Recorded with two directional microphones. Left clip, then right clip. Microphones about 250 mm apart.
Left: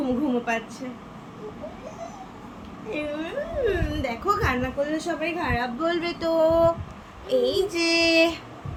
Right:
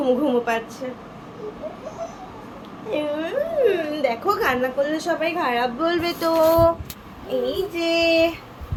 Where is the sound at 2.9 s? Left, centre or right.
Centre.